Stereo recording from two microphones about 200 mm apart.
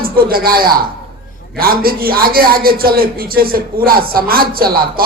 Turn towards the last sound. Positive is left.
turn(degrees=-45)  # may be behind; listen again after turning